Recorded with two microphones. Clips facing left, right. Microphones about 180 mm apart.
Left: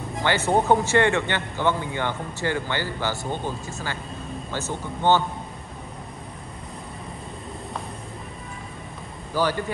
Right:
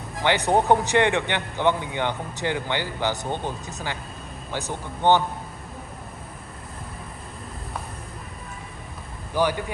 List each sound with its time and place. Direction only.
0.2 s a man's voice: 15° right (ahead or behind)
9.3 s a man's voice: 15° right (ahead or behind)